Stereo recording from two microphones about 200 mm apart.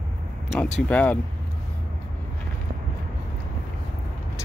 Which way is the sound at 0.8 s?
5° left (ahead or behind).